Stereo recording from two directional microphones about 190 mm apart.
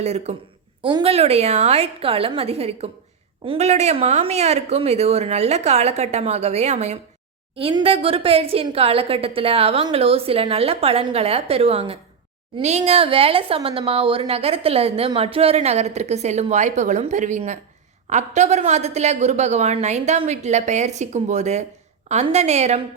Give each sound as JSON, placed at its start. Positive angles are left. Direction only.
{"t": 0.0, "sound": "a woman's voice", "side_deg": -35}